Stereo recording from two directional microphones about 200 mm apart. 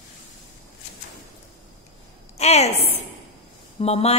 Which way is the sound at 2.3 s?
30° left (ahead or behind).